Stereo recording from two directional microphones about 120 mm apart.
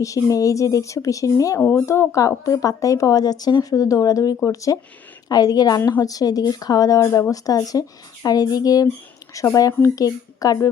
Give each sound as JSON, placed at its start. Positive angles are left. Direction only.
{"t": 0.0, "sound": "a woman's voice", "side_deg": 30}